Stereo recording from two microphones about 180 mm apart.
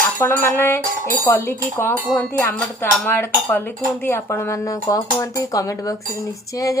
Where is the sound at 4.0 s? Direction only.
10° left (ahead or behind).